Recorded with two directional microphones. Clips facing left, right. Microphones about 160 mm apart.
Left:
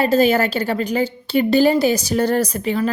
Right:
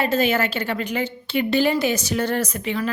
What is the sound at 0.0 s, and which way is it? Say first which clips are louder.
A woman's voice: left 5 dB; 35° left (ahead or behind).